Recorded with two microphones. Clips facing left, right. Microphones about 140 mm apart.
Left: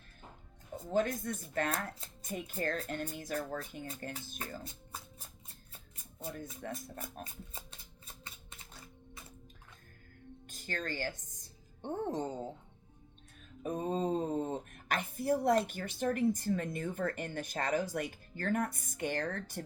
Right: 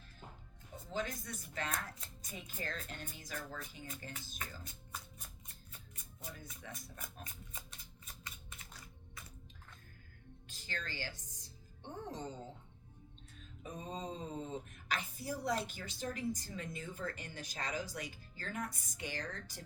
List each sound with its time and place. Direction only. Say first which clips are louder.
0.9 s speech: left 9 dB; 55° left (ahead or behind)
4.4 s speech: left 5 dB; 30° left (ahead or behind)
6.6 s speech: left 9 dB; 50° left (ahead or behind)
7.5 s shuffling cards: left 3 dB; 30° left (ahead or behind)
10.5 s speech: left 7 dB; 50° left (ahead or behind)
13.6 s speech: left 10 dB; 55° left (ahead or behind)